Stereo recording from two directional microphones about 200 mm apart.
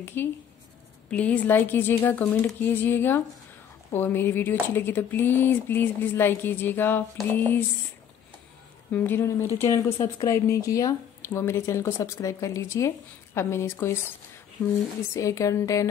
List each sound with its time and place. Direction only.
0.0 s speech: 10° left (ahead or behind)
8.9 s speech: 10° left (ahead or behind)
15.1 s speech: 15° left (ahead or behind)